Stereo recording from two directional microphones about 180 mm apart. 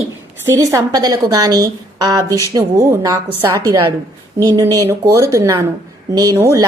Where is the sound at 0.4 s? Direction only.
15° right (ahead or behind).